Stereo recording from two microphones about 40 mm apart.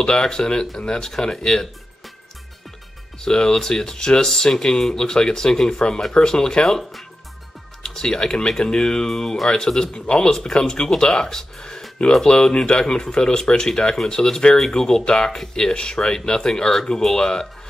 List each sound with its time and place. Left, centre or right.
0.0 s speech: centre
3.2 s speech: centre
6.6 s speech: centre
7.8 s speech: centre